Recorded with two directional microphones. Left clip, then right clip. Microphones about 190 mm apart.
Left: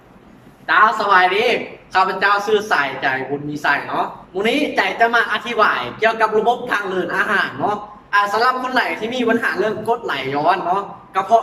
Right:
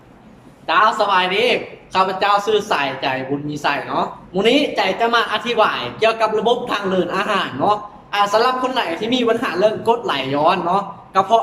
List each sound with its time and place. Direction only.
0.7 s a woman's voice: 15° right (ahead or behind)